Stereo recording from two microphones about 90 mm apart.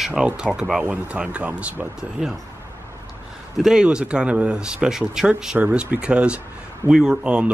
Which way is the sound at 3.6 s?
5° right (ahead or behind).